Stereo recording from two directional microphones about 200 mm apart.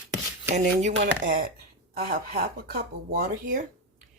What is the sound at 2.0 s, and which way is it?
Speech, 50° right (ahead or behind).